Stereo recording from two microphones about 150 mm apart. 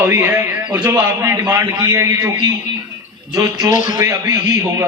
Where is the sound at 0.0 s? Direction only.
15° right (ahead or behind).